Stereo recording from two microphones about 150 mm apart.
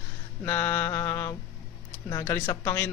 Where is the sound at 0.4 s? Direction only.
15° left (ahead or behind).